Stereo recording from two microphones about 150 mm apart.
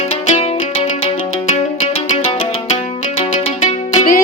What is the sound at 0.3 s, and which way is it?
Music, 45° left (ahead or behind).